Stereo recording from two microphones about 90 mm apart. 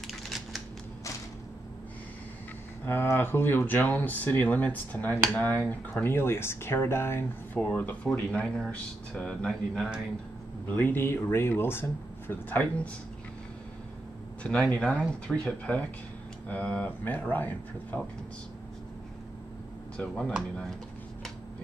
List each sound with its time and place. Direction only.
0.0 s typing: centre (ahead or behind)
2.8 s speech: 25° left (ahead or behind)
7.5 s speech: 15° left (ahead or behind)
10.7 s speech: 20° left (ahead or behind)
14.4 s speech: 10° left (ahead or behind)
20.0 s speech: 10° left (ahead or behind)